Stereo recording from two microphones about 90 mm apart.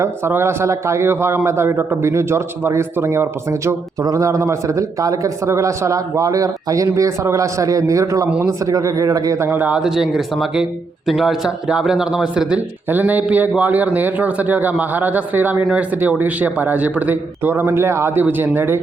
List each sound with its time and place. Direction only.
0.0 s a man's voice: 30° right (ahead or behind)
9.5 s speech: 20° right (ahead or behind)
9.8 s a man's voice: 5° right (ahead or behind); by 18.8 s 25° right (ahead or behind)